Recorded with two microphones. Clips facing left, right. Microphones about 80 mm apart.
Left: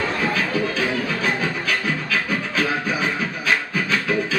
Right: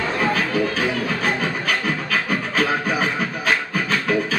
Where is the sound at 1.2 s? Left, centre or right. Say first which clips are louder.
Right 1 dB; right.